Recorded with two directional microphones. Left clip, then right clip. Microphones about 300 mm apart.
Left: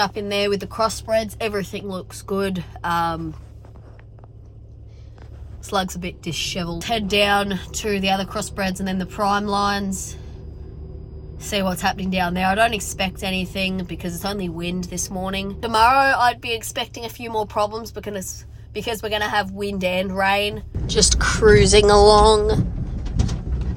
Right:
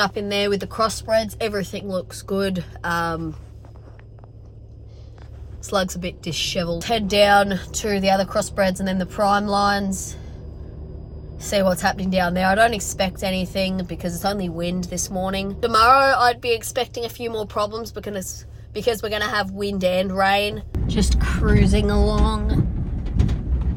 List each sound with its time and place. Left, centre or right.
0.0 s a woman's voice: centre
5.6 s a woman's voice: centre
11.3 s a woman's voice: centre
20.8 s a woman's voice: centre